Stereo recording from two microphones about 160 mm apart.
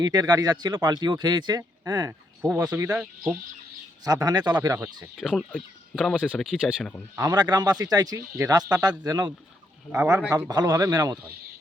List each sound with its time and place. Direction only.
0.0 s speech: 25° right (ahead or behind)
4.0 s speech: 25° right (ahead or behind)
5.1 s speech: centre (ahead or behind)
7.2 s speech: 25° right (ahead or behind)
10.2 s speech: 5° right (ahead or behind)
10.5 s speech: 25° right (ahead or behind)